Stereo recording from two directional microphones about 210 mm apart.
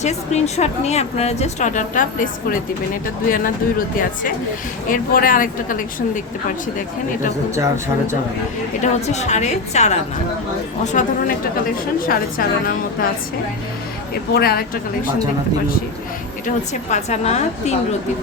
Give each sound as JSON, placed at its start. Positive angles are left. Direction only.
{"t": 0.0, "sound": "a woman's voice", "side_deg": 30}
{"t": 4.9, "sound": "a woman's voice", "side_deg": 40}
{"t": 7.5, "sound": "speech", "side_deg": -15}
{"t": 8.8, "sound": "a woman's voice", "side_deg": 30}
{"t": 11.9, "sound": "a woman's voice", "side_deg": 45}
{"t": 14.3, "sound": "a woman's voice", "side_deg": 45}
{"t": 16.9, "sound": "a woman's voice", "side_deg": 35}